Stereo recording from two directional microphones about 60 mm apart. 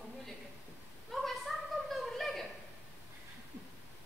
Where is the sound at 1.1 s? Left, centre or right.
Centre.